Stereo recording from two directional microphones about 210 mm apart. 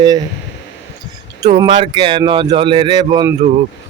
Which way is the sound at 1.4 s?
20° right (ahead or behind).